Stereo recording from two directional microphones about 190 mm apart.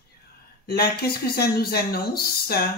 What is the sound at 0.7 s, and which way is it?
Speech, 55° left (ahead or behind).